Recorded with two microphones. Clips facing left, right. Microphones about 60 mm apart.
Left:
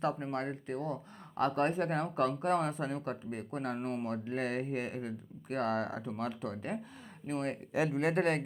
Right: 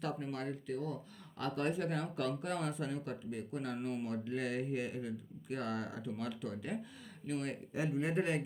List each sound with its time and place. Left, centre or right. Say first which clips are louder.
0.0 s speech: left 5 dB; left
7.7 s speech: left 5 dB; left